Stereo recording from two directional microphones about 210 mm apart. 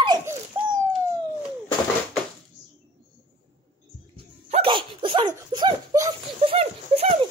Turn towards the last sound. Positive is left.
turn(degrees=-30)  # may be behind; listen again after turning